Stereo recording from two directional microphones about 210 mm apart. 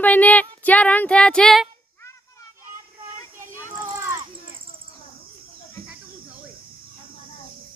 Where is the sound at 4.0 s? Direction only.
15° right (ahead or behind).